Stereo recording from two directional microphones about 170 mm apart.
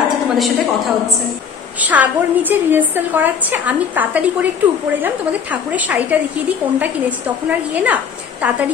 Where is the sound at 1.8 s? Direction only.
10° right (ahead or behind).